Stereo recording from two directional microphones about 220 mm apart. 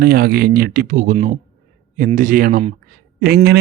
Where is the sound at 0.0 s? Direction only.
45° right (ahead or behind).